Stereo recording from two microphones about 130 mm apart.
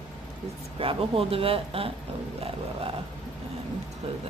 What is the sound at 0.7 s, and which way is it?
Speech, 45° right (ahead or behind).